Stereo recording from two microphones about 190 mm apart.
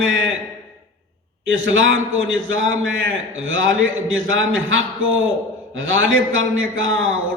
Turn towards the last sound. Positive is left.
turn(degrees=-90)